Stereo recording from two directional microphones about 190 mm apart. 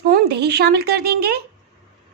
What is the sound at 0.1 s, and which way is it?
Speech, 60° right (ahead or behind).